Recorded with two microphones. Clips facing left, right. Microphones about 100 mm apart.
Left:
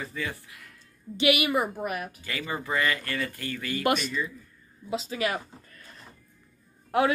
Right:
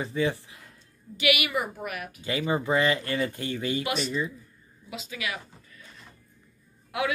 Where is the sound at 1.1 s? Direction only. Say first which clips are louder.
Left 3 dB; 30° left (ahead or behind).